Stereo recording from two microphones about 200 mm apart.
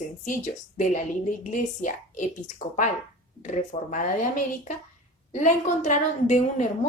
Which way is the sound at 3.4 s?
40° left (ahead or behind).